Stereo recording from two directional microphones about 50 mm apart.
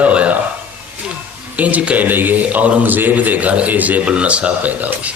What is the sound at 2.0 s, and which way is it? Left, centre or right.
A man's voice, right.